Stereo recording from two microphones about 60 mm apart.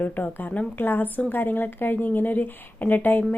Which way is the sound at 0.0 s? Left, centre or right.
Left.